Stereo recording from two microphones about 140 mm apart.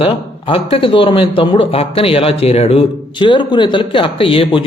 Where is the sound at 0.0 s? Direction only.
40° left (ahead or behind).